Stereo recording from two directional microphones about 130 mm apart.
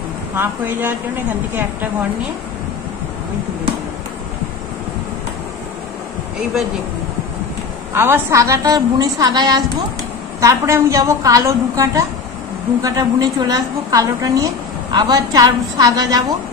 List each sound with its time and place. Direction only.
0.4 s speech: 15° right (ahead or behind)
7.9 s a woman's voice: 20° right (ahead or behind)